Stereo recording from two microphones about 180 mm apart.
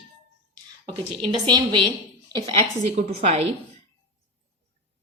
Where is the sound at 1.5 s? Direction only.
25° right (ahead or behind).